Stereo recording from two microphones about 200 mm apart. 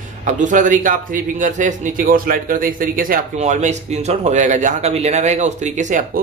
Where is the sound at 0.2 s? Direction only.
40° right (ahead or behind).